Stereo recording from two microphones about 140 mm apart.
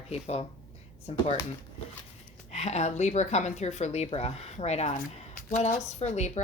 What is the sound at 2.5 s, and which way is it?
A woman's voice, 50° left (ahead or behind).